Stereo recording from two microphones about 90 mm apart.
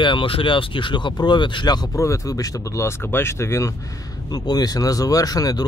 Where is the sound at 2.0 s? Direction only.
35° left (ahead or behind).